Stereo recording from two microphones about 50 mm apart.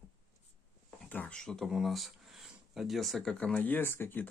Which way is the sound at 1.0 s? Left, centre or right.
Left.